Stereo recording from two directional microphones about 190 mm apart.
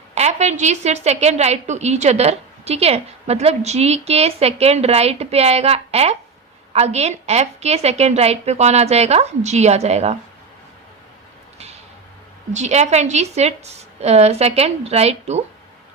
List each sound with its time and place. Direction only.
0.1 s a woman's voice: 35° right (ahead or behind)
11.5 s a sound: 35° right (ahead or behind)
12.5 s a woman's voice: 35° right (ahead or behind)